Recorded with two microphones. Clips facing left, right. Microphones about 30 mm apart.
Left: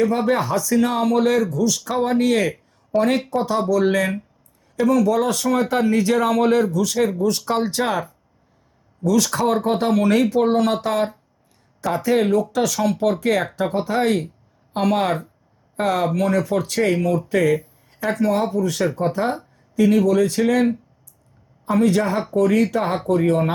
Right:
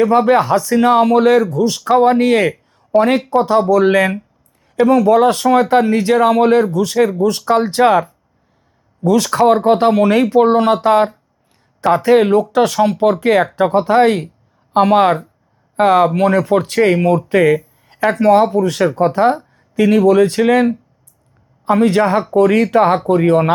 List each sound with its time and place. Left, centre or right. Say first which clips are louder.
0.2 s speech: right 8 dB; right
2.9 s speech: right 6 dB; right
3.2 s speech: right 8 dB; right
14.7 s speech: right 9 dB; right
21.7 s speech: right 6 dB; right